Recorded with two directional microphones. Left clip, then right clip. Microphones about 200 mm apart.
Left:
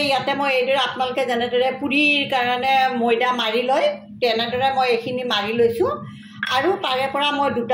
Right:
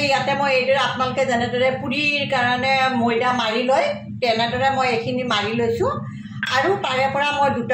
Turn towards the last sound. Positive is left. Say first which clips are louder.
# right 1 dB
turn(degrees=30)  # may be behind; listen again after turning